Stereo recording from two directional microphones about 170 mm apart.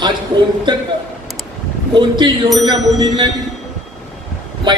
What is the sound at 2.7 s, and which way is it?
Speech, 20° right (ahead or behind).